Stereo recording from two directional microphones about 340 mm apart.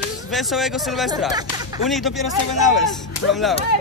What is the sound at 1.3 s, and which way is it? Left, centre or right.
Speech, centre.